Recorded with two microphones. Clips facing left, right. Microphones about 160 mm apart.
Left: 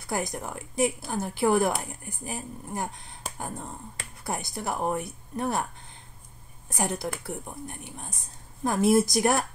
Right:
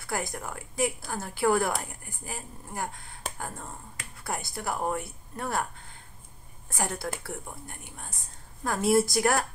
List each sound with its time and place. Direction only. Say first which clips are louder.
0.0 s speech: left 2 dB; 20° left (ahead or behind)
6.7 s speech: left 2 dB; 20° left (ahead or behind)